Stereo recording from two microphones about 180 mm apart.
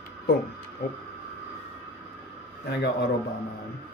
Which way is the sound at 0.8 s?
55° left (ahead or behind).